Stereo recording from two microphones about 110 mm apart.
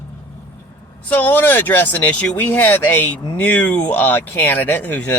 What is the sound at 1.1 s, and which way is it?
Speech, 15° left (ahead or behind).